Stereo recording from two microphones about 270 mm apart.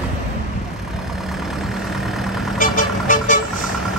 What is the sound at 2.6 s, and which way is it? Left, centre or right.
Vehicle, left.